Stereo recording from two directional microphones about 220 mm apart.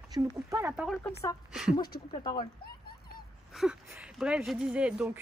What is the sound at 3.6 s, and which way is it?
Speech, centre (ahead or behind).